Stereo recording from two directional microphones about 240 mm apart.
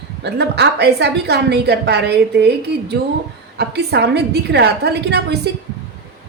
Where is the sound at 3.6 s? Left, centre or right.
Right.